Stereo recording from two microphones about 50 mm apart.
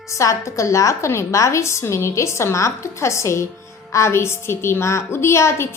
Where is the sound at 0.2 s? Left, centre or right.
Left.